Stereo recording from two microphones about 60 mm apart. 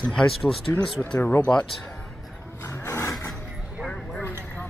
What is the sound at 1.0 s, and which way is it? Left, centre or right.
Speech, left.